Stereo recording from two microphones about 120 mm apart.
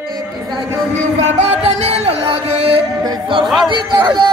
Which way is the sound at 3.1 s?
45° right (ahead or behind).